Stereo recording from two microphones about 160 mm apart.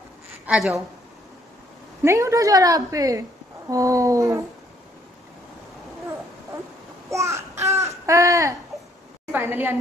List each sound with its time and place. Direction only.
0.5 s a woman's voice: 5° right (ahead or behind)
2.0 s a woman's voice: 20° right (ahead or behind)
7.1 s babbling: 20° right (ahead or behind)
9.3 s a woman's voice: 10° right (ahead or behind)